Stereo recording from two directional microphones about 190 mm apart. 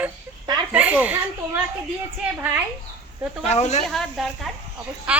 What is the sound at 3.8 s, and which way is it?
A woman's voice, centre (ahead or behind).